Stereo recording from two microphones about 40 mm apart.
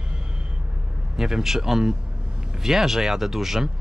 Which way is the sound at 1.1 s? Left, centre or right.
Centre.